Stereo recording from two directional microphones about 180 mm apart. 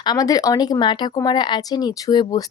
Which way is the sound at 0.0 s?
20° left (ahead or behind).